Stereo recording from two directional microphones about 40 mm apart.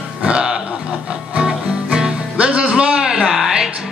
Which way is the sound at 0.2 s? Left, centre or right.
Right.